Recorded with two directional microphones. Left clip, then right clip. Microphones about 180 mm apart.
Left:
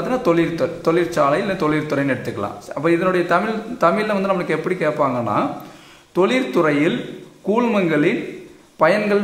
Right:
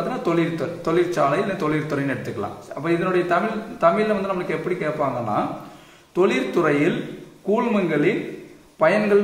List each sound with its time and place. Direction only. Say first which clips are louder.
0.1 s a man's voice: left 9 dB; 40° left (ahead or behind)
2.8 s a man's voice: left 4 dB; 40° left (ahead or behind)